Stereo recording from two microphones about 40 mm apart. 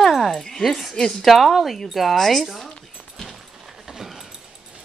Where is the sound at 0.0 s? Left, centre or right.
Centre.